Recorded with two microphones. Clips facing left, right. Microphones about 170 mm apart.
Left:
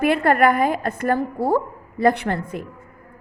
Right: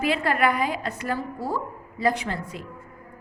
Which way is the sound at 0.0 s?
55° left (ahead or behind).